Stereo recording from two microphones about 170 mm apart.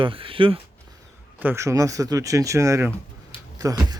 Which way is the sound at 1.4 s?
15° right (ahead or behind).